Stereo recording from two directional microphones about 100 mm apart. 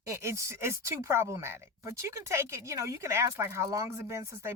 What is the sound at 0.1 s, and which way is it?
Speech, 30° right (ahead or behind).